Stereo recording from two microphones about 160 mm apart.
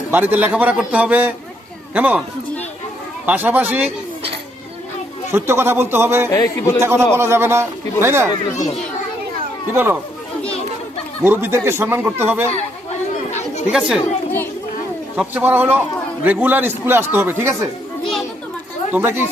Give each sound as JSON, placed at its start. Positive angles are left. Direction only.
{"t": 0.1, "sound": "a man's voice", "side_deg": -10}
{"t": 3.2, "sound": "a man's voice", "side_deg": -10}
{"t": 5.3, "sound": "a man's voice", "side_deg": -15}
{"t": 6.3, "sound": "speech", "side_deg": 20}
{"t": 6.8, "sound": "a man's voice", "side_deg": -15}
{"t": 9.7, "sound": "a man's voice", "side_deg": -15}
{"t": 10.4, "sound": "children playing", "side_deg": 40}
{"t": 11.2, "sound": "a man's voice", "side_deg": -15}
{"t": 13.7, "sound": "speech", "side_deg": -5}
{"t": 15.1, "sound": "a man's voice", "side_deg": -10}
{"t": 18.9, "sound": "a man's voice", "side_deg": -15}